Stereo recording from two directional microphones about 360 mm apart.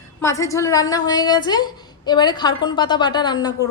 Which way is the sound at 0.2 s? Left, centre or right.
Centre.